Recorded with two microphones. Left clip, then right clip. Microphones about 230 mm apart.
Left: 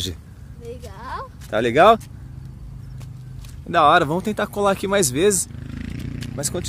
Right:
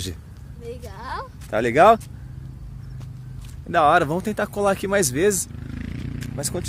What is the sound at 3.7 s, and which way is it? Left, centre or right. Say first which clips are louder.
Speech: left 2 dB; centre.